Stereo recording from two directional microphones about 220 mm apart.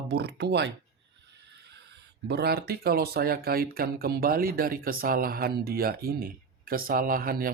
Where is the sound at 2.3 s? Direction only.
45° right (ahead or behind).